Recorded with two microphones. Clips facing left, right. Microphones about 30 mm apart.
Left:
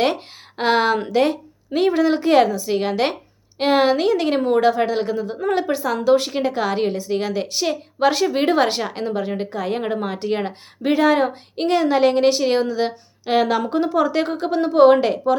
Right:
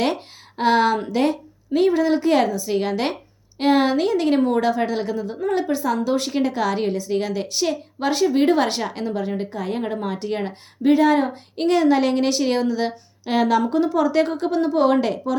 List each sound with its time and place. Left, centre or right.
0.0 s a woman's voice: left
6.2 s a woman's voice: left
8.0 s a woman's voice: left
11.5 s a woman's voice: left